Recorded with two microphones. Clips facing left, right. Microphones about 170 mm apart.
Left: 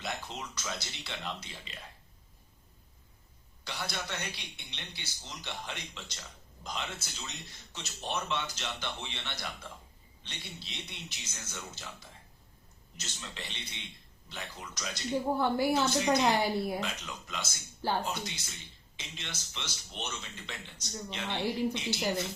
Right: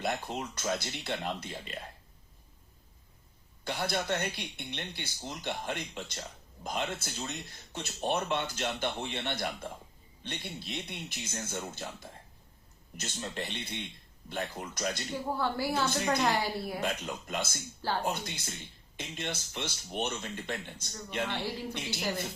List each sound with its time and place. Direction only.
0.0 s speech: 50° right (ahead or behind)
3.6 s speech: 55° right (ahead or behind)
15.3 s a woman's voice: 20° left (ahead or behind)
16.8 s speech: 50° right (ahead or behind)
21.2 s a woman's voice: 15° left (ahead or behind)